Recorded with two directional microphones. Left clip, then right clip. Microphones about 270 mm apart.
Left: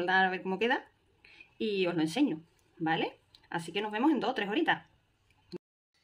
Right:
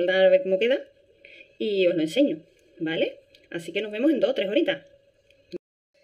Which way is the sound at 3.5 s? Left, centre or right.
Centre.